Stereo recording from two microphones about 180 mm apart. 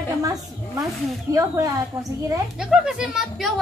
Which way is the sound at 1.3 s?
20° right (ahead or behind).